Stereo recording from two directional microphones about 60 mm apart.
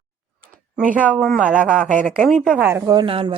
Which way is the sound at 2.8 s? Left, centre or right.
Right.